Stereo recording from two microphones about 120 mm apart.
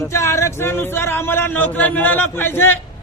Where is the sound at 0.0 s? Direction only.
25° left (ahead or behind).